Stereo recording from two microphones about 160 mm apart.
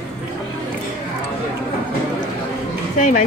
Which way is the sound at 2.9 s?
55° left (ahead or behind).